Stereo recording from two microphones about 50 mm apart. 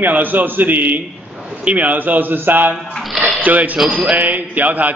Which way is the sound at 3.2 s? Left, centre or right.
Right.